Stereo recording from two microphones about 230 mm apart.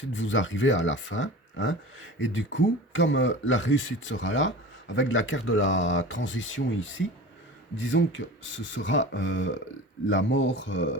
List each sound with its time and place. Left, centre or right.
0.1 s speech: left